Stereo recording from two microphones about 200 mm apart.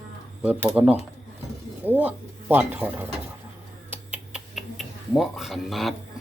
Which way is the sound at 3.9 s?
5° right (ahead or behind).